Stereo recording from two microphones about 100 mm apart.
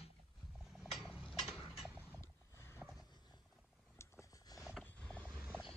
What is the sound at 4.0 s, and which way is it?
Vehicle, 30° left (ahead or behind).